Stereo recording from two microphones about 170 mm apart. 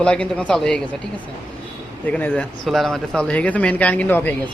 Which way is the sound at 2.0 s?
10° left (ahead or behind).